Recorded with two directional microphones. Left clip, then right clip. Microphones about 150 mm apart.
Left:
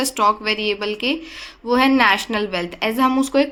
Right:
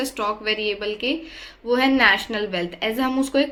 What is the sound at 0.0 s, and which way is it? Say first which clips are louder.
A woman's voice: left 7 dB; 45° left (ahead or behind).